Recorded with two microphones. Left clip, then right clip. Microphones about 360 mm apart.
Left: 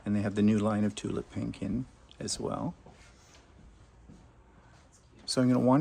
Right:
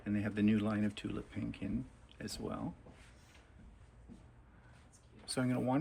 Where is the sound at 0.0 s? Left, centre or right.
Centre.